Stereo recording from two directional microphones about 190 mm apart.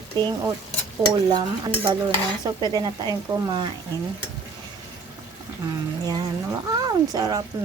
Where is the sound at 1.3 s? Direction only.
20° right (ahead or behind).